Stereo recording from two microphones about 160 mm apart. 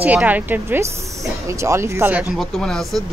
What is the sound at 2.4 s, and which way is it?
Speech, centre (ahead or behind).